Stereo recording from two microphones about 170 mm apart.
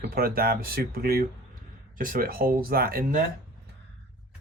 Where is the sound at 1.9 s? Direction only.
55° right (ahead or behind).